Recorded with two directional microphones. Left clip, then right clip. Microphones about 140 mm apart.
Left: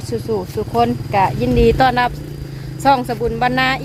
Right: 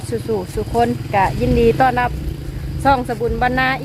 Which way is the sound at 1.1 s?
25° left (ahead or behind).